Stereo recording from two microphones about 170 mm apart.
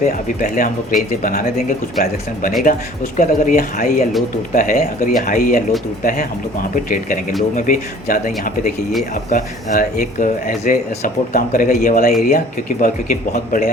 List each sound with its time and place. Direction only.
0.0 s speech: 55° left (ahead or behind)
3.2 s speech: 55° left (ahead or behind)